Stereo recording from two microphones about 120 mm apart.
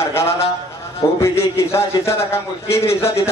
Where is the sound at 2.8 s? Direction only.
55° left (ahead or behind).